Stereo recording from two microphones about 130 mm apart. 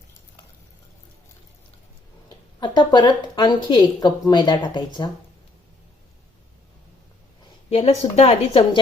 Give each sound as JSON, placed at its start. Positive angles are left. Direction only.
{"t": 2.6, "sound": "a woman's voice", "side_deg": 35}
{"t": 7.7, "sound": "a woman's voice", "side_deg": 50}